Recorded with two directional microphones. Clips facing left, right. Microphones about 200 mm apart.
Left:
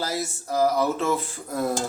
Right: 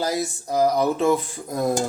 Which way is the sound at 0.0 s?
15° right (ahead or behind).